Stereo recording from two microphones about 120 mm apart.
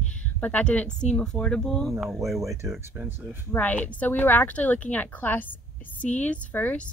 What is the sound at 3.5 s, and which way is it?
Speech, 15° left (ahead or behind).